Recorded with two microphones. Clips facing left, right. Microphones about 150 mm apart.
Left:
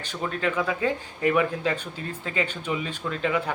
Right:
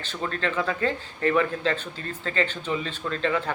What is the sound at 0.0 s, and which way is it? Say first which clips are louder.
Speech: left 1 dB; 10° left (ahead or behind).